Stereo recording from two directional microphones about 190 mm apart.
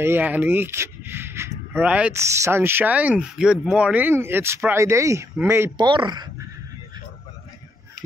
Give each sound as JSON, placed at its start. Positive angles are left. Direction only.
{"t": 0.0, "sound": "speech", "side_deg": -10}